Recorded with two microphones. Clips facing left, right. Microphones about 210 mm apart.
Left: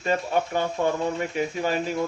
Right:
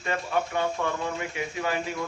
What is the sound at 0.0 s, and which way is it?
Speech, 30° left (ahead or behind).